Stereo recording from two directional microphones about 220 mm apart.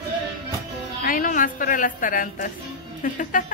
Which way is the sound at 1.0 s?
40° left (ahead or behind).